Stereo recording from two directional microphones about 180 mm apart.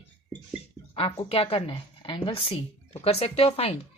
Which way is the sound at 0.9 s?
30° left (ahead or behind).